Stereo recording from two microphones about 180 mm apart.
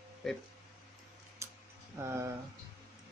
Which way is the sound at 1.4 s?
15° right (ahead or behind).